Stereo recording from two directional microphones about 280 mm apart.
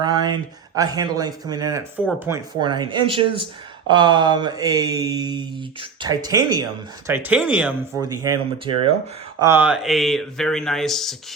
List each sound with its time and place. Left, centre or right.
0.0 s a sound: centre
0.8 s mantra: centre
9.4 s speech: centre